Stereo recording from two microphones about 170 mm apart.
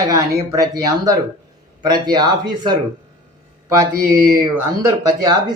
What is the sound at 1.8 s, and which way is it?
Speech, 25° right (ahead or behind).